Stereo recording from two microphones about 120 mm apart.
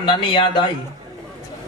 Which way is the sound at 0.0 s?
45° left (ahead or behind).